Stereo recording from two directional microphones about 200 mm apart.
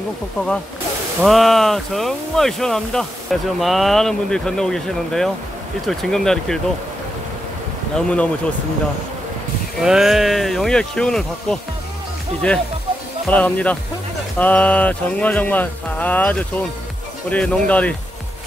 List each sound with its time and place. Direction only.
1.2 s speech: centre (ahead or behind)
7.9 s speech: 5° left (ahead or behind)
9.8 s speech: centre (ahead or behind)
13.3 s speech: 5° left (ahead or behind)